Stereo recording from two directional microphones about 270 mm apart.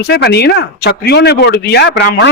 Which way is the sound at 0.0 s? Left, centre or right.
Left.